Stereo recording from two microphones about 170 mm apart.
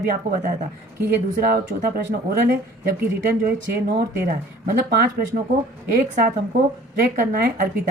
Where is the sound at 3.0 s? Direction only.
60° right (ahead or behind).